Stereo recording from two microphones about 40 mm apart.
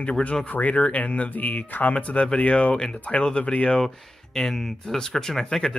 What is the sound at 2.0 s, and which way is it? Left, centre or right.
Speech, left.